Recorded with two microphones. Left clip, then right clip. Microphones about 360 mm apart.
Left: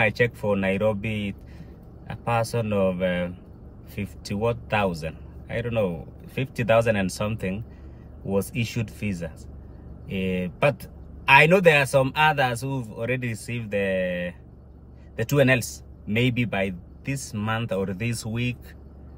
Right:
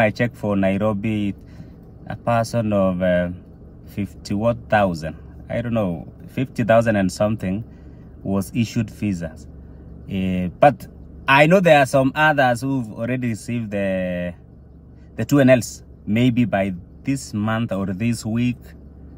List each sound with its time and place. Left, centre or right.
0.0 s speech: centre